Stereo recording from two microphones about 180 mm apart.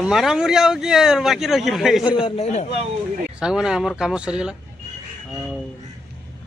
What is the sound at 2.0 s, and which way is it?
Speech, 30° left (ahead or behind).